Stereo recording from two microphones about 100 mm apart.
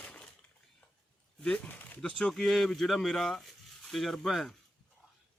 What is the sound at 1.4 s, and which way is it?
Speech, 15° left (ahead or behind).